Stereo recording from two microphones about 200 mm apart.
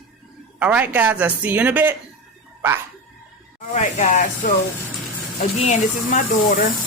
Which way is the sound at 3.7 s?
40° left (ahead or behind).